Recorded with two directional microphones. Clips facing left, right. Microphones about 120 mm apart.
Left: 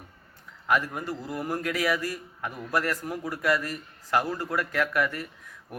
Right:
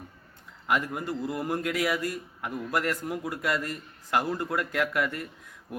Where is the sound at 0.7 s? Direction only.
20° right (ahead or behind).